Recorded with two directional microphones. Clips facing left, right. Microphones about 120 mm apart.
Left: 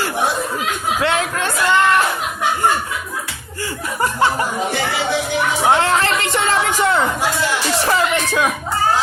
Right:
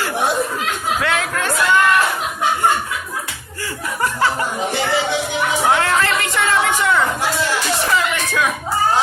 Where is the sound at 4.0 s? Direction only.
25° left (ahead or behind).